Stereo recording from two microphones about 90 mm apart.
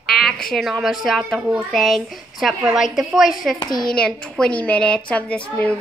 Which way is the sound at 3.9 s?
10° left (ahead or behind).